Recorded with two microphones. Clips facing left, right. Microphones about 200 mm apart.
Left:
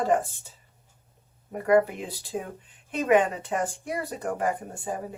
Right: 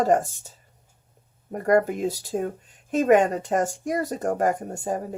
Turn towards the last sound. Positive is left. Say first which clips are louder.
# right 5 dB
turn(degrees=-40)  # may be behind; listen again after turning